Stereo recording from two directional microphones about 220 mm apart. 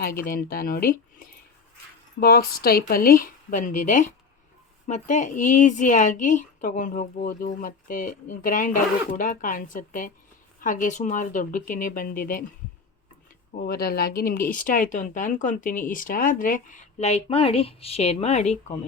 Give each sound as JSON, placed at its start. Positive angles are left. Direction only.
{"t": 0.2, "sound": "a woman's voice", "side_deg": 45}
{"t": 13.6, "sound": "a woman's voice", "side_deg": 45}